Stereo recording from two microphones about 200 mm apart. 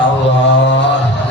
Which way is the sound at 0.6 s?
60° left (ahead or behind).